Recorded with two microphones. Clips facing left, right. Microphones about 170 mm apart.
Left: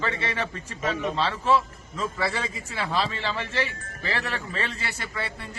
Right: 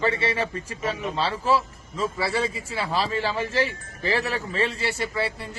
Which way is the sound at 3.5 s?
35° right (ahead or behind).